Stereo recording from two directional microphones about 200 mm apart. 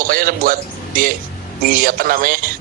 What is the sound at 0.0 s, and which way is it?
A man's voice, 45° right (ahead or behind).